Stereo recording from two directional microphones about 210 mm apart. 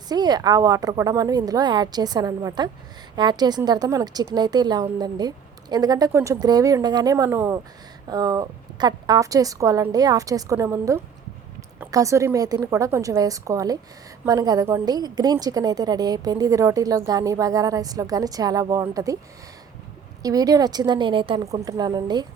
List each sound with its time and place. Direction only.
0.1 s a woman's voice: 20° right (ahead or behind)
20.2 s speech: 15° right (ahead or behind)